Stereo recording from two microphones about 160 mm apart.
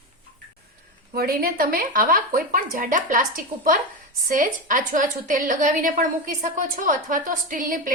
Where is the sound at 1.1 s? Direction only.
70° right (ahead or behind).